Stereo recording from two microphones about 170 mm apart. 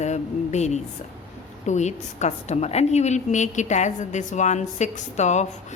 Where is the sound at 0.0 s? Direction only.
40° left (ahead or behind).